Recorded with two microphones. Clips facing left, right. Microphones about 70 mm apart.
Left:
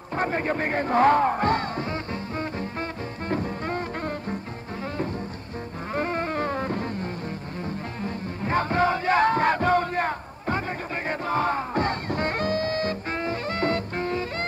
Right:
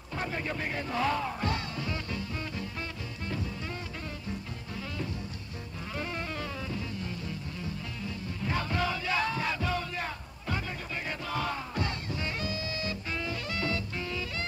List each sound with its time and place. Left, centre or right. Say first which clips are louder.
0.1 s speech: left 9 dB; left
3.3 s music: left 9 dB; left
5.9 s music: left 10 dB; left